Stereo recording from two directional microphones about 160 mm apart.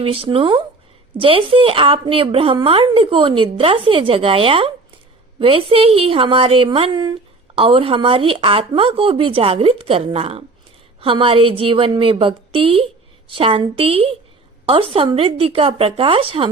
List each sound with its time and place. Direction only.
0.0 s a woman's voice: 35° right (ahead or behind)